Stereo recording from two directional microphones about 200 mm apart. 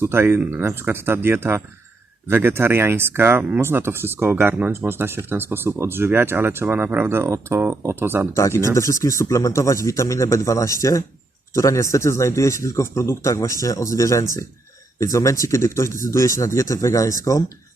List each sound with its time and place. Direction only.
0.0 s speech: 10° right (ahead or behind)
8.3 s speech: 15° left (ahead or behind)